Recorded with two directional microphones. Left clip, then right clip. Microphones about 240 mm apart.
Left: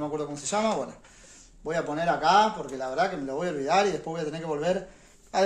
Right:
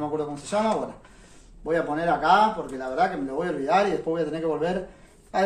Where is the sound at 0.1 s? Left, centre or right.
Left.